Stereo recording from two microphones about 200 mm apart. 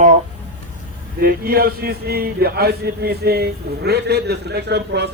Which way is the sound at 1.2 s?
50° right (ahead or behind).